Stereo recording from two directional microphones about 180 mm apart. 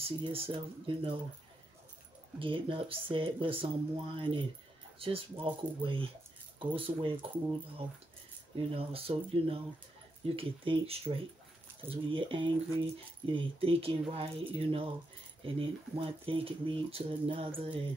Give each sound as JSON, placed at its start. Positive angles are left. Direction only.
{"t": 0.0, "sound": "speech", "side_deg": -30}
{"t": 2.3, "sound": "speech", "side_deg": -30}
{"t": 8.5, "sound": "speech", "side_deg": -30}